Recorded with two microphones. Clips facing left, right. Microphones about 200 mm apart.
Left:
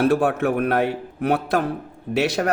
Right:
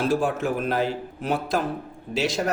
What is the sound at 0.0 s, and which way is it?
A man's voice, 60° left (ahead or behind).